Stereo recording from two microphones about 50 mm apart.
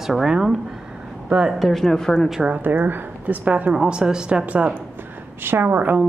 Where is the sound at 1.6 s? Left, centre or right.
Centre.